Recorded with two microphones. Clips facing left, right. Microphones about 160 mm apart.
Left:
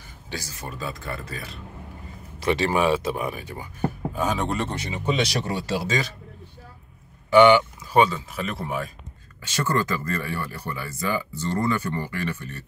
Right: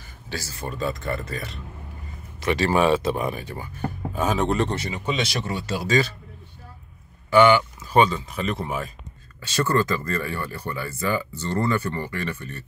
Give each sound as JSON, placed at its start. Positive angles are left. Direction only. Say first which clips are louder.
{"t": 0.3, "sound": "speech", "louder": "right 2 dB", "side_deg": 15}
{"t": 0.7, "sound": "speech", "louder": "right 6 dB", "side_deg": 5}
{"t": 2.4, "sound": "speech", "louder": "even", "side_deg": 25}
{"t": 2.7, "sound": "speech", "louder": "right 2 dB", "side_deg": 10}
{"t": 4.1, "sound": "speech", "louder": "right 6 dB", "side_deg": 0}
{"t": 4.9, "sound": "speech", "louder": "left 2 dB", "side_deg": 30}
{"t": 5.9, "sound": "speech", "louder": "right 5 dB", "side_deg": 15}
{"t": 7.2, "sound": "a sound", "louder": "left 1 dB", "side_deg": 20}
{"t": 7.9, "sound": "speech", "louder": "right 1 dB", "side_deg": 5}
{"t": 9.4, "sound": "speech", "louder": "right 3 dB", "side_deg": 10}